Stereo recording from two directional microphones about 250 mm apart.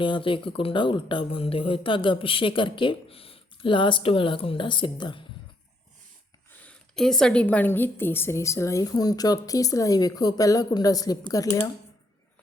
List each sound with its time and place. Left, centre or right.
0.0 s speech: centre
6.7 s a woman's voice: centre